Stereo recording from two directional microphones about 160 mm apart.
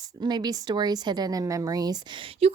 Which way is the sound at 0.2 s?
25° right (ahead or behind).